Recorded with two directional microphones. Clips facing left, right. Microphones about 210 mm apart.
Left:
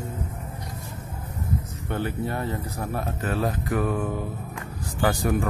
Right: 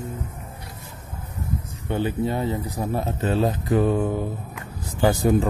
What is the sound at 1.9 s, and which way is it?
A man's voice, 15° right (ahead or behind).